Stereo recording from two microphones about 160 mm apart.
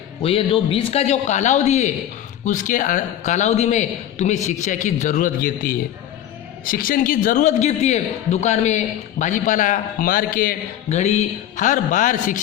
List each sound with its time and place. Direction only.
0.2 s a man's voice: 35° left (ahead or behind); by 10.6 s 65° left (ahead or behind)
10.8 s a man's voice: 45° left (ahead or behind)